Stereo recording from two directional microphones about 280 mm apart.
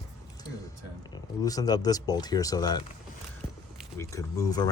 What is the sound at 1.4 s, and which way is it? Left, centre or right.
Speech, centre.